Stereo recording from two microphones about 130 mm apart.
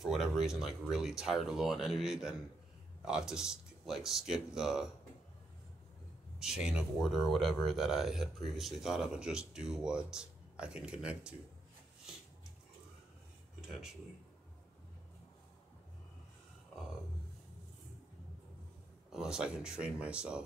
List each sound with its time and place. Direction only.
0.0 s speech: centre (ahead or behind)
6.4 s speech: 5° right (ahead or behind)
19.1 s speech: 5° right (ahead or behind)